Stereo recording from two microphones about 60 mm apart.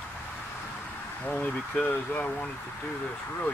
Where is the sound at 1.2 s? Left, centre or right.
Left.